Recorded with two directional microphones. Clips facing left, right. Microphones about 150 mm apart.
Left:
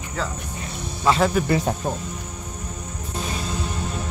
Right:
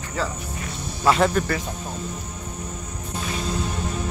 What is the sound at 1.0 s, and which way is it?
Speech, centre (ahead or behind).